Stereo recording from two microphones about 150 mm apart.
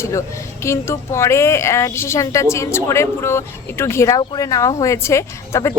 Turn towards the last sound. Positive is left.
turn(degrees=20)  # may be behind; listen again after turning